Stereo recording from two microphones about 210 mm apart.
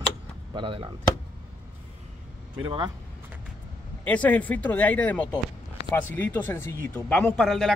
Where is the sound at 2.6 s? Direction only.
25° right (ahead or behind).